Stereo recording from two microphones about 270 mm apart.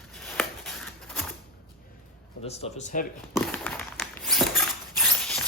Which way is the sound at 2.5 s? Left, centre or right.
Left.